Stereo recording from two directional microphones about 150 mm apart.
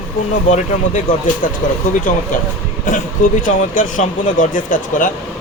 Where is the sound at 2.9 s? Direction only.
60° left (ahead or behind).